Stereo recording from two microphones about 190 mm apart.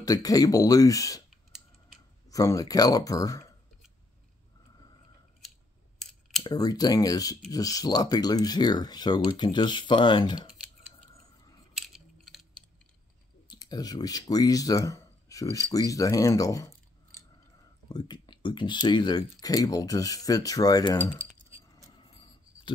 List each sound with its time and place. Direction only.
0.0 s speech: 20° left (ahead or behind)
1.3 s a sound: centre (ahead or behind)
2.2 s speech: 20° left (ahead or behind)
6.4 s speech: 20° left (ahead or behind)
11.7 s a sound: centre (ahead or behind)
13.5 s speech: 20° left (ahead or behind)
17.8 s speech: 20° left (ahead or behind)